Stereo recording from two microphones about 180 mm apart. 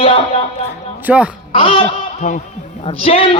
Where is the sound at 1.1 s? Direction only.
5° right (ahead or behind).